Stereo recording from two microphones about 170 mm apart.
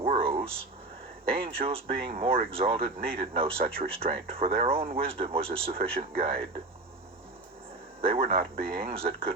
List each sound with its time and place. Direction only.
0.0 s a sound: 35° right (ahead or behind)
1.3 s speech: 35° right (ahead or behind)
8.0 s speech: 35° right (ahead or behind)